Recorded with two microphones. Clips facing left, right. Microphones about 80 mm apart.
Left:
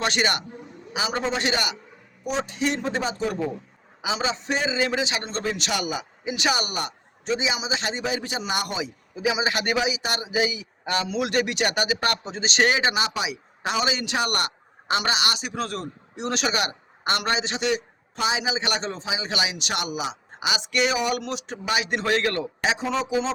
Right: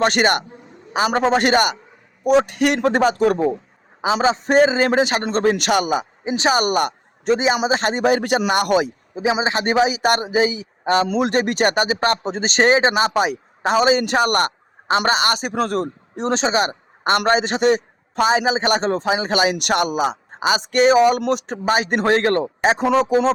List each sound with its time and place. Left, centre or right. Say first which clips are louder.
0.0 s a man's voice: right 7 dB; right
4.0 s a man's voice: right 9 dB; right
6.6 s a man's voice: right 11 dB; right
9.1 s a man's voice: right 5 dB; right